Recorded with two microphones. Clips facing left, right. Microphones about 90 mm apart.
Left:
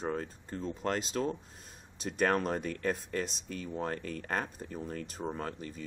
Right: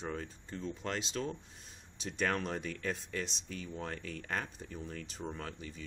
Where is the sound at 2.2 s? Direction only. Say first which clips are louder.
Left 5 dB; 45° left (ahead or behind).